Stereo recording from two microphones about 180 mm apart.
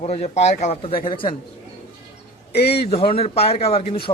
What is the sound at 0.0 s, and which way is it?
Speech, 35° left (ahead or behind).